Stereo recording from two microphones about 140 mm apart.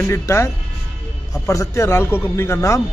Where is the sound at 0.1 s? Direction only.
20° left (ahead or behind).